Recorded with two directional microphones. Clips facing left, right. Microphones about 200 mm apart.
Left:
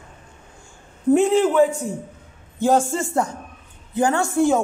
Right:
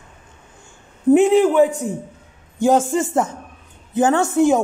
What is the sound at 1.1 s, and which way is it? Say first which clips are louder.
A man's voice: right 3 dB; 15° right (ahead or behind).